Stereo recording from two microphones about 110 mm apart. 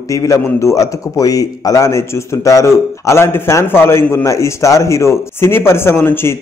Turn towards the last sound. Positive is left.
turn(degrees=20)  # may be behind; listen again after turning